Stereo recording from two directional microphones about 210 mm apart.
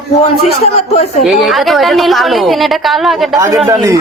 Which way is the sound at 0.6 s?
30° left (ahead or behind).